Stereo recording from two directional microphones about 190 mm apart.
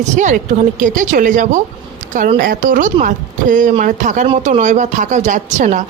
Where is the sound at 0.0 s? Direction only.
40° right (ahead or behind).